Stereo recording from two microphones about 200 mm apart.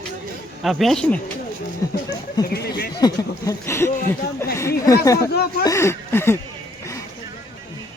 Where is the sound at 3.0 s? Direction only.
20° left (ahead or behind).